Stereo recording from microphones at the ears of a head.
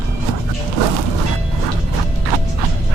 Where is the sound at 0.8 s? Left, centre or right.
Right.